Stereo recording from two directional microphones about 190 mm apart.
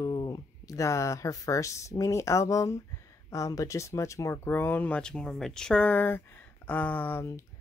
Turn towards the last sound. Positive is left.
turn(degrees=10)  # may be behind; listen again after turning